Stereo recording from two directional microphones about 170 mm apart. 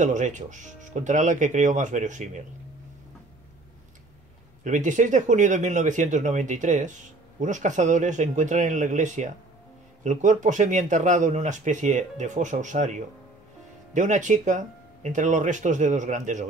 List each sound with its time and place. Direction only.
0.0 s speech: 45° right (ahead or behind)
4.6 s speech: 45° right (ahead or behind)